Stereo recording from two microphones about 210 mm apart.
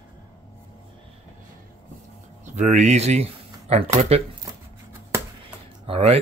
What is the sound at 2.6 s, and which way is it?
Speech, 35° right (ahead or behind).